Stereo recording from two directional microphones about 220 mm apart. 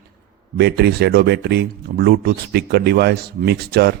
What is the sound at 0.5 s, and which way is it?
Speech, 45° right (ahead or behind).